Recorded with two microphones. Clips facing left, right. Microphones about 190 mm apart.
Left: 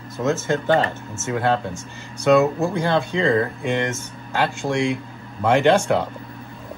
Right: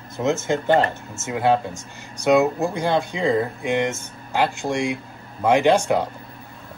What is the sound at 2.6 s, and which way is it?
Speech, 15° right (ahead or behind).